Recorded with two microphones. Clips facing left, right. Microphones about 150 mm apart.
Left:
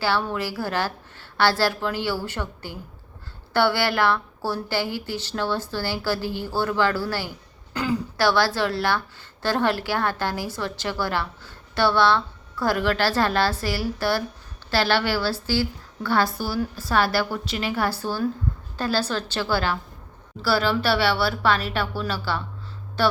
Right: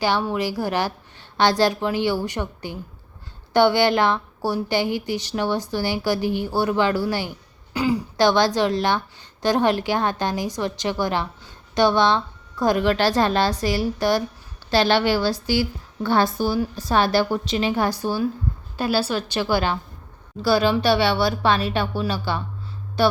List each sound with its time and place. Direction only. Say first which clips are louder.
0.0 s a woman's voice: right 3 dB; 15° right (ahead or behind)